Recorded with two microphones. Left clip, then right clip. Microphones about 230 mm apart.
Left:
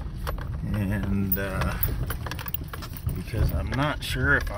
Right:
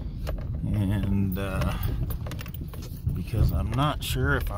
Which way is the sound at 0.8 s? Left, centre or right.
Centre.